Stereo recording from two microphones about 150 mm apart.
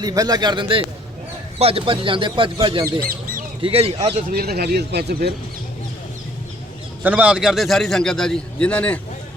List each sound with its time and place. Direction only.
0.0 s speech: 25° right (ahead or behind); by 3.9 s 40° right (ahead or behind)
4.3 s speech: 90° right
7.0 s a man's voice: 10° right (ahead or behind); by 9.0 s 10° left (ahead or behind)